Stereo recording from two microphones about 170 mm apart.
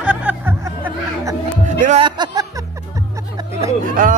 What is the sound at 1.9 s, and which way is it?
Music, 25° right (ahead or behind).